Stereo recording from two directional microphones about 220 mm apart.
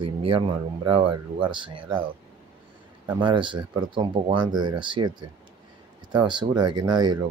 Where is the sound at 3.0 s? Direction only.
20° right (ahead or behind).